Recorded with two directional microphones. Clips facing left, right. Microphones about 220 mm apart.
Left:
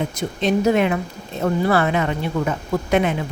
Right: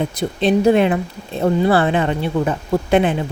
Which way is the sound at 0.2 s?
30° right (ahead or behind).